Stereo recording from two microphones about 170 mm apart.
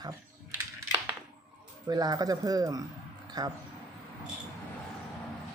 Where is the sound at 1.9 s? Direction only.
25° right (ahead or behind).